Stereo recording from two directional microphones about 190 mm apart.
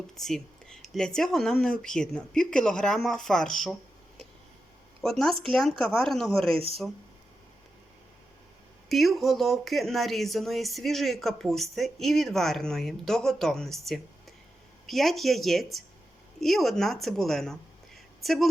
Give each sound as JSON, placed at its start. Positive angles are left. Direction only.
{"t": 0.2, "sound": "speech", "side_deg": 0}
{"t": 5.0, "sound": "speech", "side_deg": 0}
{"t": 6.5, "sound": "speech", "side_deg": -30}
{"t": 8.9, "sound": "speech", "side_deg": 0}